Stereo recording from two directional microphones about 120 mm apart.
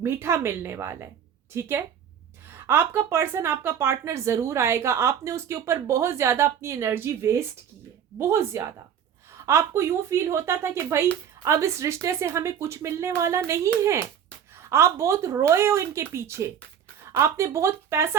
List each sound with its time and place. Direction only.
0.0 s a woman's voice: 20° right (ahead or behind)
14.6 s a woman's voice: 20° right (ahead or behind)